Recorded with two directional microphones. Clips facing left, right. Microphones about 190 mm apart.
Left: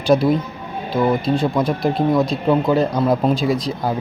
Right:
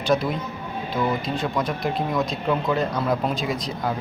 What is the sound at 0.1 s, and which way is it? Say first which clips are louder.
Speech: left 7 dB; 35° left (ahead or behind).